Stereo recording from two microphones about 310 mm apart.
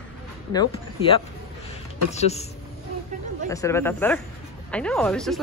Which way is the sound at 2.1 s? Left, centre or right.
Left.